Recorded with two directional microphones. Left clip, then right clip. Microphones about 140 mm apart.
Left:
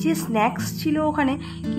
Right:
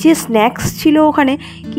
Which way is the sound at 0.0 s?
65° right (ahead or behind).